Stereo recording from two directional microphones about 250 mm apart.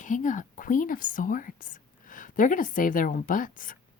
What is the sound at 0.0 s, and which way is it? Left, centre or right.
Speech, left.